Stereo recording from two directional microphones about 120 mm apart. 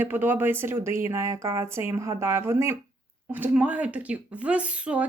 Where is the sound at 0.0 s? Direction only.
15° right (ahead or behind).